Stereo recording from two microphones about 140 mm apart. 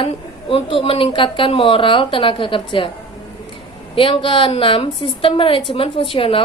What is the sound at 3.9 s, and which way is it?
Speech, 40° left (ahead or behind).